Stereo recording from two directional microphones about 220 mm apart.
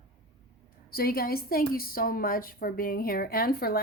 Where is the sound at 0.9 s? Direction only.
40° left (ahead or behind).